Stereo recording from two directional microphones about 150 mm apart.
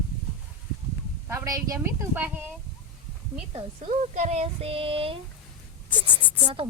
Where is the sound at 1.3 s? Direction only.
20° right (ahead or behind).